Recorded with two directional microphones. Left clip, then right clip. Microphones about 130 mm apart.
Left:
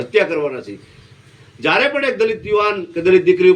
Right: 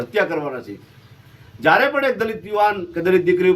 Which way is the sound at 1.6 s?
40° right (ahead or behind).